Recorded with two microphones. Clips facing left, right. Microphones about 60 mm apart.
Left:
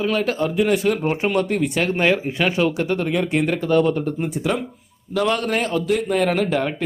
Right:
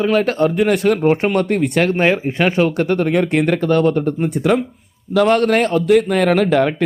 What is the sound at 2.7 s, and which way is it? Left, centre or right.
Speech, right.